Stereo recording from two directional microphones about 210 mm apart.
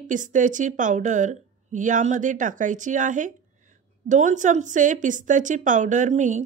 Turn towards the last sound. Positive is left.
turn(degrees=-35)  # may be behind; listen again after turning